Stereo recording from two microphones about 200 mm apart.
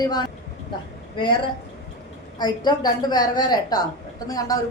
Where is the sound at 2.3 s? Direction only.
20° left (ahead or behind).